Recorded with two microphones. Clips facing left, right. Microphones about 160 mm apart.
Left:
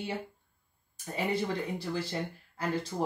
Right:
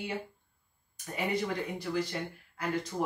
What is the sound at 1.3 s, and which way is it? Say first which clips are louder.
Speech: left 1 dB; 30° left (ahead or behind).